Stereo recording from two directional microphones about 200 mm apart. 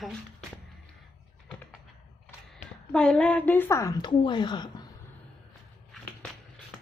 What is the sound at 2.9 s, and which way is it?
A woman's voice, 5° left (ahead or behind).